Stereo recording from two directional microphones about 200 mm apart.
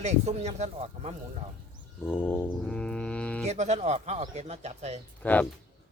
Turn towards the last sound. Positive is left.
turn(degrees=10)  # may be behind; listen again after turning